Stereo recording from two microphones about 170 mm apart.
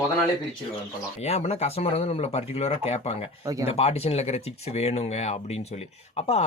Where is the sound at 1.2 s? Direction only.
40° left (ahead or behind).